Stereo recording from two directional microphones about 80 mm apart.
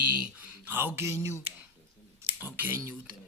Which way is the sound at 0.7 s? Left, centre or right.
Right.